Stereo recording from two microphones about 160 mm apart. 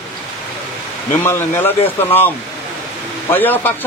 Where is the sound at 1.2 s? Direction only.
15° left (ahead or behind).